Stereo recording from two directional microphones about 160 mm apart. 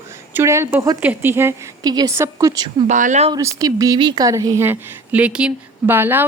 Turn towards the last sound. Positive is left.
turn(degrees=-15)  # may be behind; listen again after turning